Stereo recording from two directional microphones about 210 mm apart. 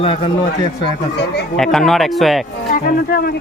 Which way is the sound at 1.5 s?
Centre (ahead or behind).